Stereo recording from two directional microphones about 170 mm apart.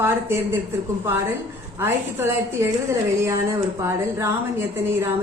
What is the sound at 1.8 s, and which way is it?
A woman's voice, 15° right (ahead or behind).